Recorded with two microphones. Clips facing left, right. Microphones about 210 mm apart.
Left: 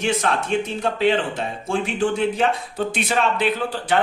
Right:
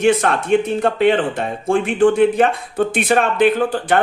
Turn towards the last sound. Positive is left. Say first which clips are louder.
# right 5 dB
turn(degrees=-50)  # may be behind; listen again after turning